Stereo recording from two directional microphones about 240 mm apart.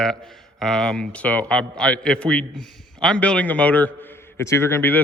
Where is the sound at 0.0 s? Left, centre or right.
Centre.